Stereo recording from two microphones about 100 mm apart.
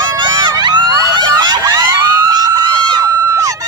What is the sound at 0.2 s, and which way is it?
Emergency vehicle, 50° right (ahead or behind).